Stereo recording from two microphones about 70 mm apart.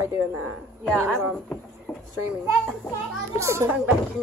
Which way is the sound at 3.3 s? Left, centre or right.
Right.